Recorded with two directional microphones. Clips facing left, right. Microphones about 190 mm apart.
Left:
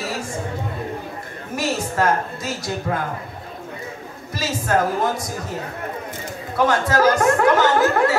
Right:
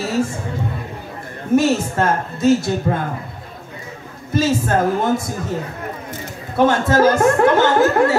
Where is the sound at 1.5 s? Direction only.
25° right (ahead or behind).